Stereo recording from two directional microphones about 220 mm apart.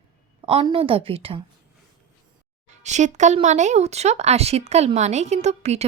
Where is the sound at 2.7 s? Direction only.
30° right (ahead or behind).